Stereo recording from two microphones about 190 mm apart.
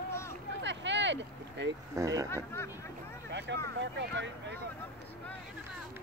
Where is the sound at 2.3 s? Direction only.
15° left (ahead or behind).